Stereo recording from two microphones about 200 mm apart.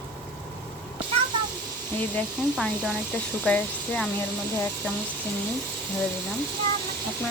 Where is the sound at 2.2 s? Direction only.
5° left (ahead or behind).